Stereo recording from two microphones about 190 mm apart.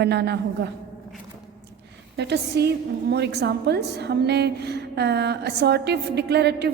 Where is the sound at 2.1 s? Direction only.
60° right (ahead or behind).